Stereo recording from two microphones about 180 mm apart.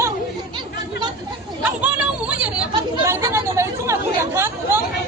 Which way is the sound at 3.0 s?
15° right (ahead or behind).